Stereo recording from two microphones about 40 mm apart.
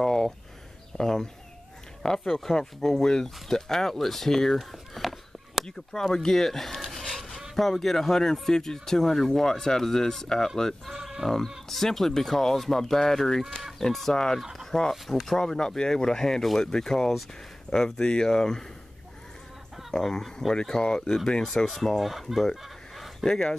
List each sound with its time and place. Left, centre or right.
0.0 s a sound: centre
0.9 s speech: centre
4.6 s a sound: centre
5.7 s speech: centre
10.9 s sheep: centre
11.4 s speech: centre
11.8 s speech: centre
19.9 s speech: centre
22.3 s chicken: centre
23.2 s speech: centre